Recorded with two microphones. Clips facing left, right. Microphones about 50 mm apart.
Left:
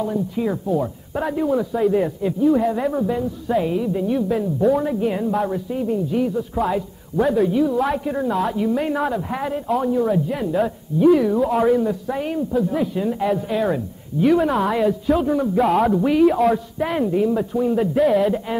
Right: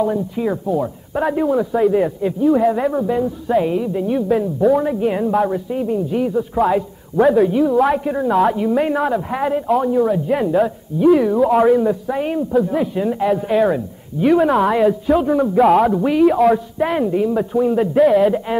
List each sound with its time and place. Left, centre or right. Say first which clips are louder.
0.4 s a woman's voice: right 1 dB; centre
12.1 s a woman's voice: right 4 dB; centre
13.2 s a man's voice: right 6 dB; centre